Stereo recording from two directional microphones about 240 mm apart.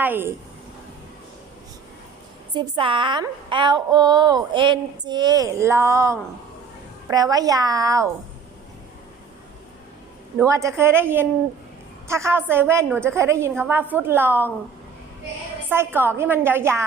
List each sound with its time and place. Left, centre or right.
0.0 s a woman's voice: centre
2.6 s a woman's voice: right
10.3 s a woman's voice: centre
15.7 s a woman's voice: centre